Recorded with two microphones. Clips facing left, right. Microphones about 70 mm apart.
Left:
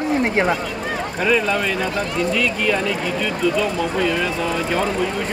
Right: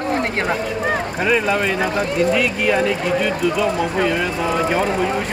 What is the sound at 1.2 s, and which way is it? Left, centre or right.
Speech, centre.